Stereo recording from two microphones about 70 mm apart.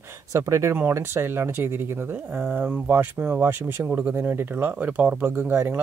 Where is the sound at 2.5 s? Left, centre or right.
Right.